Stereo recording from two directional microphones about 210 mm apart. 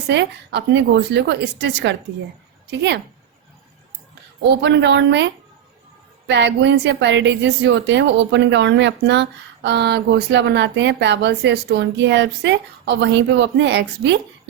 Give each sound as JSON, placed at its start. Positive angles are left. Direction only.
{"t": 0.1, "sound": "a woman's voice", "side_deg": -55}
{"t": 4.4, "sound": "speech", "side_deg": -55}